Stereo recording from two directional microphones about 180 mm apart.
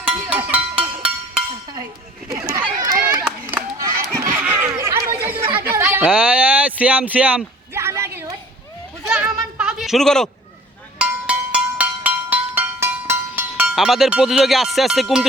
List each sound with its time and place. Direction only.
0.0 s music: 5° right (ahead or behind)
2.3 s chatter: 20° right (ahead or behind)
3.1 s run: 15° right (ahead or behind)
4.4 s a sound: 10° right (ahead or behind)
10.9 s music: 5° right (ahead or behind)